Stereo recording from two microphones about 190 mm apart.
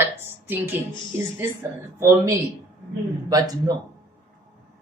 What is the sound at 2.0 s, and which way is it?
A woman's voice, 15° right (ahead or behind).